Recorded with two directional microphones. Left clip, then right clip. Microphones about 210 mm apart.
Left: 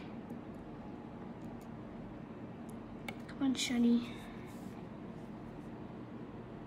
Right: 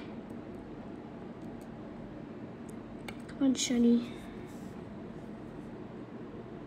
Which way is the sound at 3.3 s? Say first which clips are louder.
Right 5 dB; 30° left (ahead or behind).